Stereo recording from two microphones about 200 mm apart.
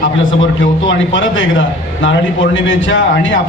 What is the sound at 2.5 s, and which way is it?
Speech, 70° left (ahead or behind).